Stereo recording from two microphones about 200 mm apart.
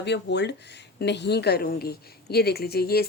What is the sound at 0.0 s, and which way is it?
A woman's voice, 60° left (ahead or behind).